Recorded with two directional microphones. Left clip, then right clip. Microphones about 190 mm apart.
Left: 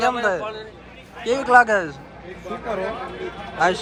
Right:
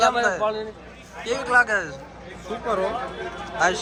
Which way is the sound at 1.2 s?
5° left (ahead or behind).